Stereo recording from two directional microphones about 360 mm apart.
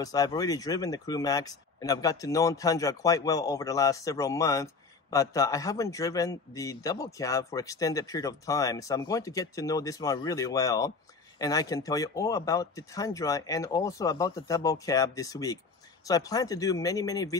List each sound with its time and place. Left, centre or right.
0.0 s a man's voice: centre